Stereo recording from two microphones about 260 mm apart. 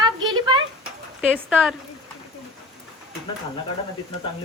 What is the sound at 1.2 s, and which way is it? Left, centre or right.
Speech, centre.